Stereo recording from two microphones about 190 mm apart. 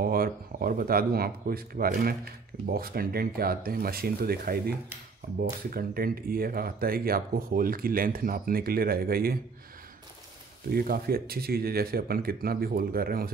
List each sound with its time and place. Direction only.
0.0 s speech: 50° right (ahead or behind)
10.7 s speech: 50° right (ahead or behind)